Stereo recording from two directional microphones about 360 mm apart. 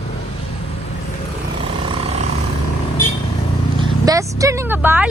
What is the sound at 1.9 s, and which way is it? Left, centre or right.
Vehicle, centre.